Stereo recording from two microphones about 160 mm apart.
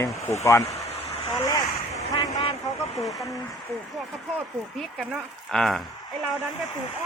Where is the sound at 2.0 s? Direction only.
40° left (ahead or behind).